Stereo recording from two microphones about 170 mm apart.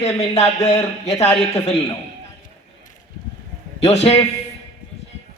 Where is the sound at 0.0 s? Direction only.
40° left (ahead or behind).